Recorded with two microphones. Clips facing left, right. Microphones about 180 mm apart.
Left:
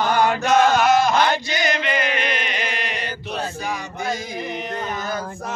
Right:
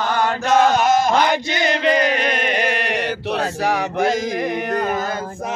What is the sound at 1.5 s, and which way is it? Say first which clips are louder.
Chant: right 5 dB; 30° right (ahead or behind).